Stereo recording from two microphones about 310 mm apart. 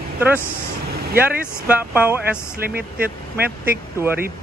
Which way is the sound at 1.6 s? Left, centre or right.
Centre.